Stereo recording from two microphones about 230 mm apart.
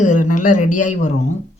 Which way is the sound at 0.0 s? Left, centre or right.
Left.